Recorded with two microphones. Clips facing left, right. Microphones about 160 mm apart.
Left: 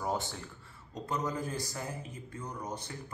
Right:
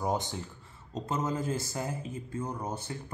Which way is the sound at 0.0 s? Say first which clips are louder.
Right 3 dB; 20° right (ahead or behind).